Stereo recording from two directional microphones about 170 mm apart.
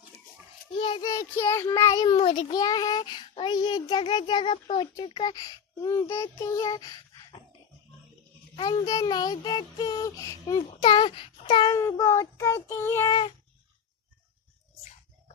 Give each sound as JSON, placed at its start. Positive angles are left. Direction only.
{"t": 0.8, "sound": "a child's voice", "side_deg": 25}
{"t": 8.5, "sound": "a child's voice", "side_deg": 25}